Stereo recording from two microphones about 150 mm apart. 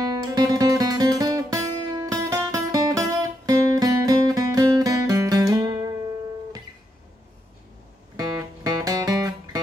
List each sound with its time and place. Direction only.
0.0 s music: 25° right (ahead or behind)
8.2 s music: 25° right (ahead or behind)